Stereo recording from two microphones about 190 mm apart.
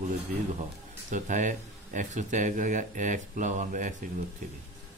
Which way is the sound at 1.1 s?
40° right (ahead or behind).